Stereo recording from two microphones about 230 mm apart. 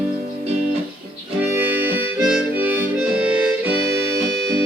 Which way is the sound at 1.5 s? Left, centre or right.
Centre.